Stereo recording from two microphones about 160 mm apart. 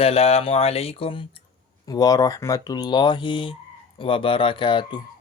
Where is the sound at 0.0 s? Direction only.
40° left (ahead or behind).